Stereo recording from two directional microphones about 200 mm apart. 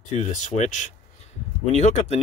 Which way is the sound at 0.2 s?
35° left (ahead or behind).